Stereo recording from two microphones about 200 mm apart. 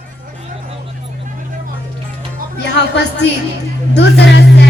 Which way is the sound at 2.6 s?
60° left (ahead or behind).